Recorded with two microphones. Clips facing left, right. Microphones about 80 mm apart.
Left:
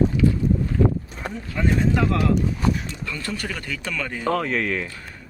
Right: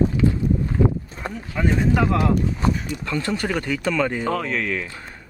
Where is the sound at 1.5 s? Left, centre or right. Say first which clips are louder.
Right 1 dB; centre.